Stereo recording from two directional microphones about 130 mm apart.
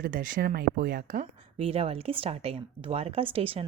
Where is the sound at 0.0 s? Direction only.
90° right.